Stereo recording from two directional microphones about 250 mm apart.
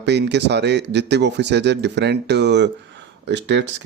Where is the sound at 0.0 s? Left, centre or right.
Right.